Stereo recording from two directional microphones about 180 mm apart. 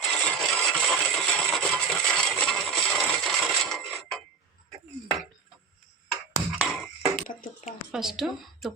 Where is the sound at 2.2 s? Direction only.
5° left (ahead or behind).